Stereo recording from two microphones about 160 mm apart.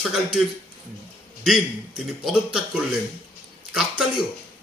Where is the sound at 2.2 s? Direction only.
5° right (ahead or behind).